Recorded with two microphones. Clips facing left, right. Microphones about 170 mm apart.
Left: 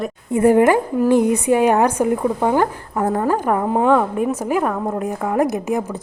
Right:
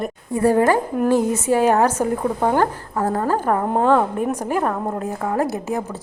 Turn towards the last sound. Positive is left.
turn(degrees=15)  # may be behind; listen again after turning